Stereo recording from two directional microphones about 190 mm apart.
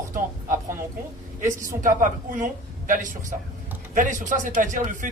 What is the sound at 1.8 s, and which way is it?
A man's voice, 45° right (ahead or behind).